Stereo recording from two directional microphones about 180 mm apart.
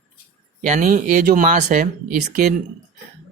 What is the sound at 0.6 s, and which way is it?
Speech, 45° right (ahead or behind).